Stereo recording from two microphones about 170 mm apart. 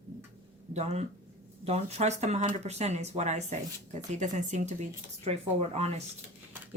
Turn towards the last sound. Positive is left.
turn(degrees=-40)  # may be behind; listen again after turning